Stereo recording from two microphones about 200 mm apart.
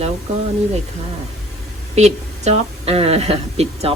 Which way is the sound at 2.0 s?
35° right (ahead or behind).